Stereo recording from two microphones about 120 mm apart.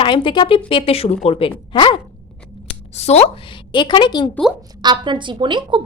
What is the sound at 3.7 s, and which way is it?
Speech, 40° left (ahead or behind).